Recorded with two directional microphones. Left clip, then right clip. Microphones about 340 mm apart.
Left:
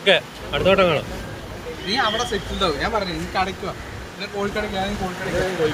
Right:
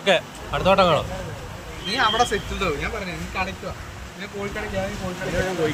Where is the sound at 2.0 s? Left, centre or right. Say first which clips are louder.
Right 1 dB; centre.